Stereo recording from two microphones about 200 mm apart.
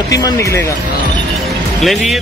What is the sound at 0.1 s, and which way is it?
Speech, 15° left (ahead or behind).